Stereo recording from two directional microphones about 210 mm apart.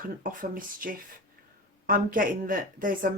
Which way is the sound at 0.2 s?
40° right (ahead or behind).